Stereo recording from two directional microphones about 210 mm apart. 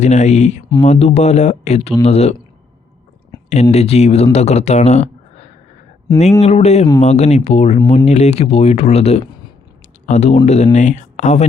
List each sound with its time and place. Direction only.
0.0 s speech: 35° left (ahead or behind)
3.5 s speech: 30° left (ahead or behind)